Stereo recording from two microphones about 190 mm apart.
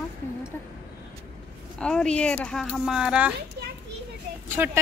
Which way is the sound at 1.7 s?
5° left (ahead or behind).